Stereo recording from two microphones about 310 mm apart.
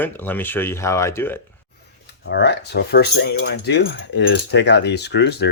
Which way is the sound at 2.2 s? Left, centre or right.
Left.